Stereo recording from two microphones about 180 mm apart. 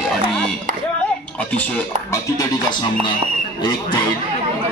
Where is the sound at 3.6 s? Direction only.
25° left (ahead or behind).